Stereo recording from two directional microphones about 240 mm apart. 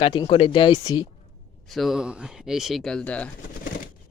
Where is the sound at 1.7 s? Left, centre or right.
Centre.